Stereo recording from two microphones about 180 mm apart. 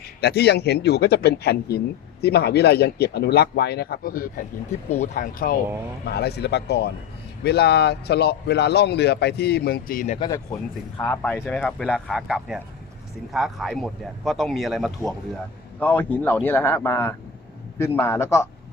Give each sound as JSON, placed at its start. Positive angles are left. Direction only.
{"t": 0.2, "sound": "a man's voice", "side_deg": 65}
{"t": 6.1, "sound": "a man's voice", "side_deg": 65}
{"t": 10.2, "sound": "a man's voice", "side_deg": 20}
{"t": 15.8, "sound": "speech", "side_deg": 10}